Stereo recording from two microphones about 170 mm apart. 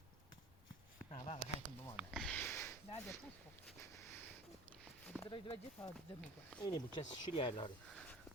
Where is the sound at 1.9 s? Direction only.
Centre (ahead or behind); by 4.2 s 15° left (ahead or behind).